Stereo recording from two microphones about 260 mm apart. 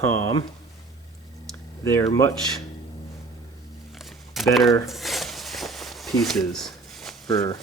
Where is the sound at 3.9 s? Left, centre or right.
Centre.